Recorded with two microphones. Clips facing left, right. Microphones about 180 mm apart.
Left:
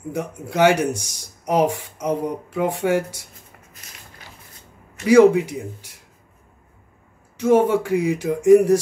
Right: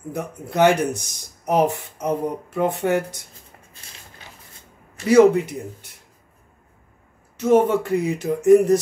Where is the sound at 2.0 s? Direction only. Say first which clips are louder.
Even; 10° left (ahead or behind).